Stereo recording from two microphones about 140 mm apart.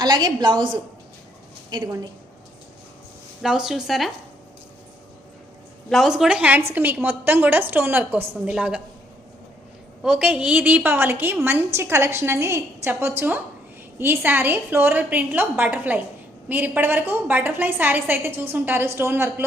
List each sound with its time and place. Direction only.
0.0 s a woman's voice: 30° right (ahead or behind)
3.4 s speech: 5° right (ahead or behind)
5.9 s a woman's voice: centre (ahead or behind)
10.0 s a woman's voice: 5° right (ahead or behind)